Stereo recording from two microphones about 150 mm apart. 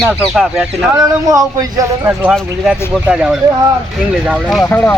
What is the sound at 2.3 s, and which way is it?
Speech, 5° right (ahead or behind).